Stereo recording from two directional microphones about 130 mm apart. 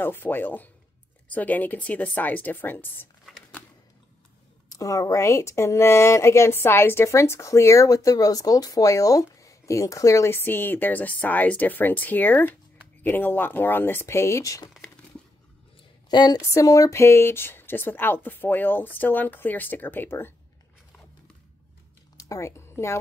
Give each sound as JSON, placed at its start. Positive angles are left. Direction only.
{"t": 0.0, "sound": "speech", "side_deg": 15}
{"t": 4.6, "sound": "speech", "side_deg": 25}
{"t": 16.1, "sound": "speech", "side_deg": 35}
{"t": 22.1, "sound": "a sound", "side_deg": 25}